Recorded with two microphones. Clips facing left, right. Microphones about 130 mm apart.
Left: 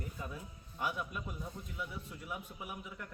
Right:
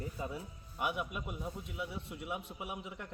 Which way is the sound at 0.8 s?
15° right (ahead or behind).